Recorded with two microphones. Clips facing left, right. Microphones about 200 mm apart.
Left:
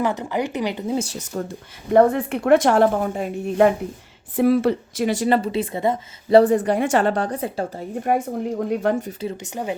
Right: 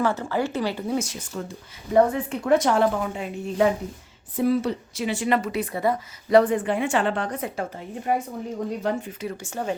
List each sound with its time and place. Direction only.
0.0 s speech: 15° left (ahead or behind)
0.9 s a woman's voice: 30° left (ahead or behind)
1.9 s a woman's voice: 55° left (ahead or behind)
3.4 s a woman's voice: 60° left (ahead or behind); by 7.9 s 30° left (ahead or behind)
8.0 s a woman's voice: 55° left (ahead or behind)
9.2 s speech: 20° left (ahead or behind)